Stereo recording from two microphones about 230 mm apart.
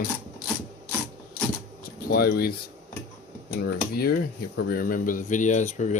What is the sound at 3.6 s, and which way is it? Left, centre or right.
Speech, left.